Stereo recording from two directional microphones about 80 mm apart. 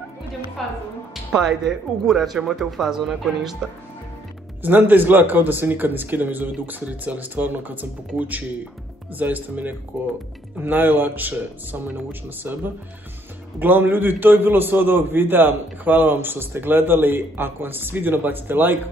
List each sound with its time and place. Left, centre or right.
0.6 s speech: centre
4.6 s a man's voice: right